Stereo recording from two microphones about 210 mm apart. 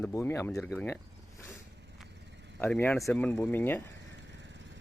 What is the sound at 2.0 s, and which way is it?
Vehicle, 55° right (ahead or behind).